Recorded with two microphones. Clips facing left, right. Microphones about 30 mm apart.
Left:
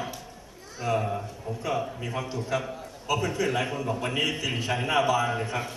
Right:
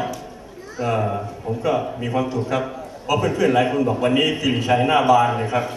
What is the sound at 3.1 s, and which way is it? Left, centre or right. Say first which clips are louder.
Speech: right 7 dB; right.